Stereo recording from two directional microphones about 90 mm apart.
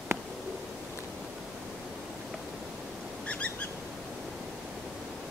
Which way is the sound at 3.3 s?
15° left (ahead or behind).